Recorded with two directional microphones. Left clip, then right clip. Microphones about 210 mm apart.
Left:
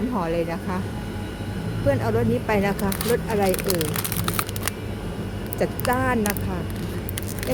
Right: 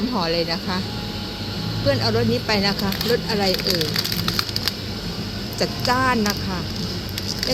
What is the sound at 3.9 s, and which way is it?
Rain on surface, 45° left (ahead or behind).